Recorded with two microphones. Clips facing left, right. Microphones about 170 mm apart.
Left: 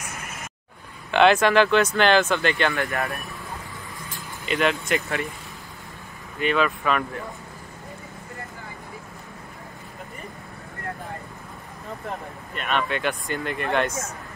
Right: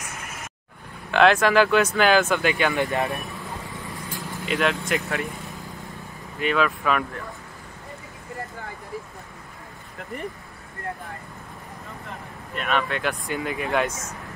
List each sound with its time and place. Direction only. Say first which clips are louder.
1.1 s speech: even; centre (ahead or behind)
2.7 s speech: right 3 dB; 20° right (ahead or behind)
4.5 s speech: left 1 dB; centre (ahead or behind)
6.4 s speech: even; centre (ahead or behind)
12.5 s speech: right 1 dB; centre (ahead or behind)